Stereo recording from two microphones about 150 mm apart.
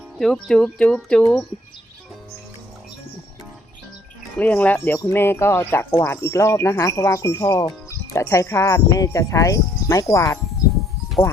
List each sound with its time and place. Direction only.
0.2 s speech: 5° left (ahead or behind)
4.4 s speech: 10° left (ahead or behind)